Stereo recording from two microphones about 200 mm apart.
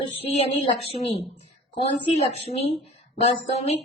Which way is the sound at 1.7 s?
30° left (ahead or behind).